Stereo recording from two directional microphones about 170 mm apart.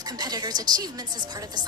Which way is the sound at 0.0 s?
25° right (ahead or behind).